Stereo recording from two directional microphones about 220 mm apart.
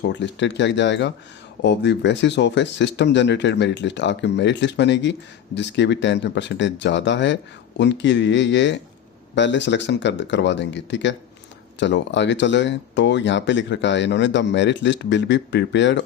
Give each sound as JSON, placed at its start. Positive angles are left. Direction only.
{"t": 0.0, "sound": "speech", "side_deg": 55}